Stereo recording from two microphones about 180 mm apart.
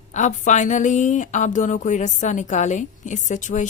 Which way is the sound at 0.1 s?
40° left (ahead or behind).